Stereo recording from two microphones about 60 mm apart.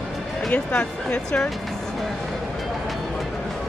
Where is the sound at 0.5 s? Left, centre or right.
Left.